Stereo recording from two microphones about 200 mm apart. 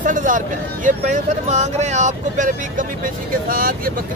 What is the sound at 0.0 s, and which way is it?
Speech, 40° right (ahead or behind).